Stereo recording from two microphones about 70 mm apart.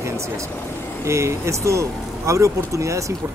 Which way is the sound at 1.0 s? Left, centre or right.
Right.